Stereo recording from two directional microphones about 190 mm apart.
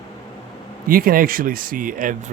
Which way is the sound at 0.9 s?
50° right (ahead or behind).